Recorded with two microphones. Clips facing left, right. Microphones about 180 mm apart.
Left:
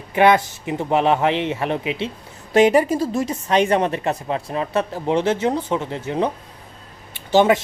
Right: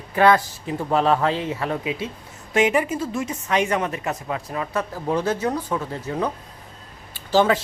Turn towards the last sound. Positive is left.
turn(degrees=20)  # may be behind; listen again after turning